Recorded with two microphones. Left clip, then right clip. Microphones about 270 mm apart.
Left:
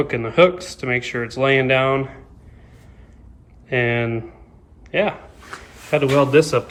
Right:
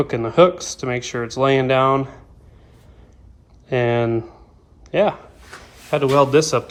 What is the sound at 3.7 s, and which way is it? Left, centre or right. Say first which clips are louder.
Speech: right 1 dB; centre.